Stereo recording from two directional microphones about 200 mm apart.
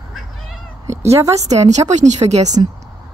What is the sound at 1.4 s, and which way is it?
Speech, 35° right (ahead or behind).